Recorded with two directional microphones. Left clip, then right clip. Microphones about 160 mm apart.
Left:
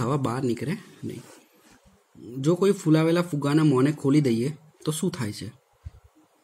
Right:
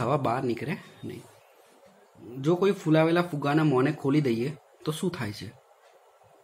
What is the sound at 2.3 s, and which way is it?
Speech, 45° left (ahead or behind).